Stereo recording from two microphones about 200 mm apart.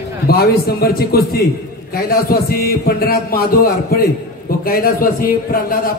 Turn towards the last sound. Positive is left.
turn(degrees=45)  # may be behind; listen again after turning